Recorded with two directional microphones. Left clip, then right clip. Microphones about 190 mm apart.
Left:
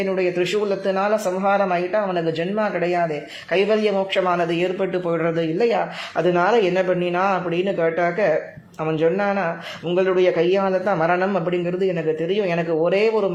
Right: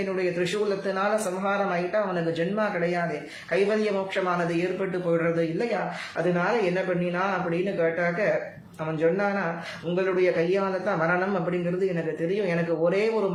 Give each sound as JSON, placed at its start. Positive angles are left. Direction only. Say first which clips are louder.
{"t": 0.2, "sound": "a man's voice", "louder": "left 4 dB", "side_deg": 30}
{"t": 12.5, "sound": "a man's voice", "louder": "left 4 dB", "side_deg": 30}